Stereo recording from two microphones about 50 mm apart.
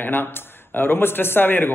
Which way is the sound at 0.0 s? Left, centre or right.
Left.